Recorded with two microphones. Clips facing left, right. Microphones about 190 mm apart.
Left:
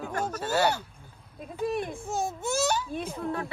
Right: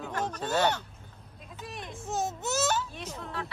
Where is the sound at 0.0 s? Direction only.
5° left (ahead or behind).